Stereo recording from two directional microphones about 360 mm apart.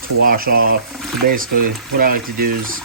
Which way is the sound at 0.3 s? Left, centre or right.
Right.